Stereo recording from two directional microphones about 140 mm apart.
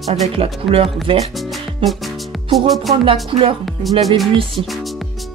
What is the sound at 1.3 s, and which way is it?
Music, centre (ahead or behind).